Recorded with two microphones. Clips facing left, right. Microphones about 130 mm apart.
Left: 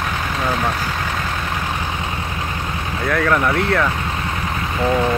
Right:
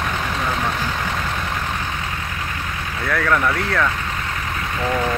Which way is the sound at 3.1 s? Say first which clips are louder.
Left 2 dB; 10° left (ahead or behind).